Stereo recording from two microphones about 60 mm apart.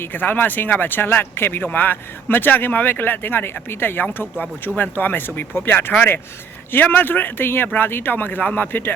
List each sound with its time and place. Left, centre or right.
0.0 s speech: left